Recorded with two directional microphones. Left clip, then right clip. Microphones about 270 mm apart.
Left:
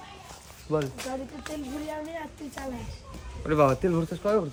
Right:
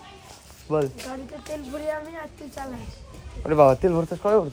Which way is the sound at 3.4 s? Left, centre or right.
Centre.